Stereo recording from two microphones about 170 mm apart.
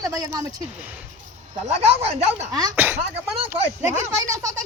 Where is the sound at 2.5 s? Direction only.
20° right (ahead or behind).